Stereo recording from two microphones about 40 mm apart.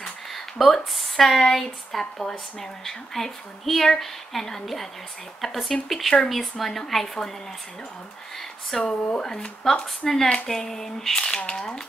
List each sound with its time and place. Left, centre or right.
0.0 s a sound: centre
1.4 s speech: centre
8.6 s speech: centre